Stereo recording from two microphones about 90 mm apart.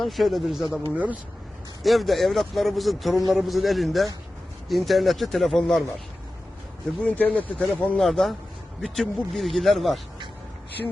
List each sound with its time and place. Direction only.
0.0 s a man's voice: centre (ahead or behind)
0.9 s speech: 15° right (ahead or behind)
1.8 s a man's voice: centre (ahead or behind)
7.0 s speech: 15° left (ahead or behind)
7.6 s a man's voice: 5° left (ahead or behind)